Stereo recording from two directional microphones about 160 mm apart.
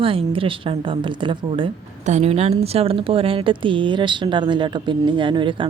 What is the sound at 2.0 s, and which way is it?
Speech, 40° right (ahead or behind).